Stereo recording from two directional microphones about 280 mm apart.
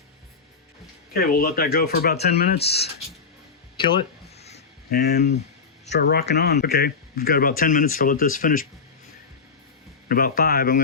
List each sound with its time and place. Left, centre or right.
1.1 s speech: left
2.6 s speech: left
4.4 s a sound: left
4.9 s speech: left
10.1 s speech: left